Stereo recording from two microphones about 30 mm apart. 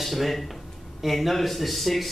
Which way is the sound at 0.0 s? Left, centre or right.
Centre.